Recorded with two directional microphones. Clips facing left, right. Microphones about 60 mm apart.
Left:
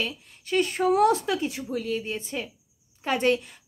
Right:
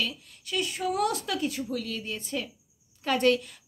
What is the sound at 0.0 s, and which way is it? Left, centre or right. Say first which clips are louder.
A woman's voice: left 1 dB; left.